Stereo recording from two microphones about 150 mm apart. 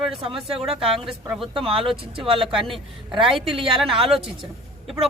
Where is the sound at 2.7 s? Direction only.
35° right (ahead or behind).